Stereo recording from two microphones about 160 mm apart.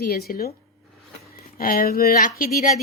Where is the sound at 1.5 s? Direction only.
65° left (ahead or behind).